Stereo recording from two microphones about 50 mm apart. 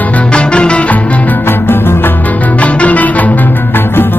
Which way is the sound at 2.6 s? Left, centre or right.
Left.